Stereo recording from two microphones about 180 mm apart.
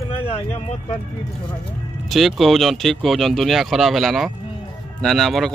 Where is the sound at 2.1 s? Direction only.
Centre (ahead or behind).